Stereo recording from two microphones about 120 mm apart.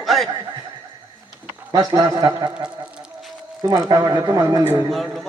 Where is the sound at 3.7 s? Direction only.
30° right (ahead or behind).